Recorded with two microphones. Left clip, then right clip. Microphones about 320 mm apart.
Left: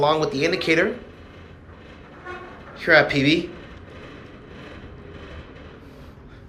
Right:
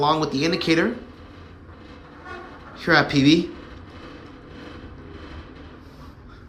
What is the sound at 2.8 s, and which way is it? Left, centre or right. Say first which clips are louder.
Speech: left 2 dB; centre.